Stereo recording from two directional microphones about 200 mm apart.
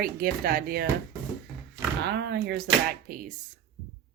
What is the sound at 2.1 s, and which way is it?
Speech, 55° right (ahead or behind).